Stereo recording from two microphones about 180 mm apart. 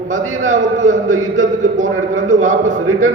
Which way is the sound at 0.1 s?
45° right (ahead or behind).